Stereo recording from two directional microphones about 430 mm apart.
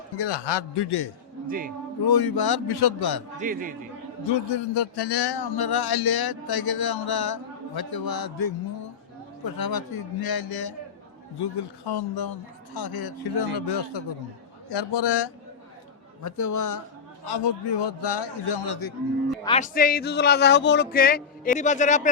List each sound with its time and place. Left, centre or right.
0.2 s a man's voice: left
1.5 s a man's voice: centre
2.0 s a man's voice: left
3.4 s a man's voice: centre
4.3 s a man's voice: left
13.7 s a man's voice: left
16.2 s a man's voice: left
17.2 s a man's voice: left
19.5 s a man's voice: centre